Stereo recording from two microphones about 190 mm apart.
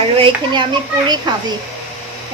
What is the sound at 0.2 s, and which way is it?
A child's voice, 25° right (ahead or behind).